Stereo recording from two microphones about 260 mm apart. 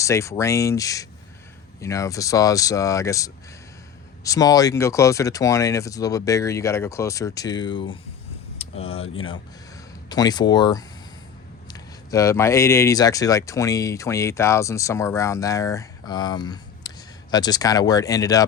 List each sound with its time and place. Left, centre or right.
0.0 s a man's voice: centre
10.1 s a man's voice: centre